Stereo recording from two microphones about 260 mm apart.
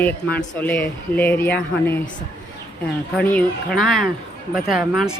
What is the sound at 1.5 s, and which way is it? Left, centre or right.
Speech, left.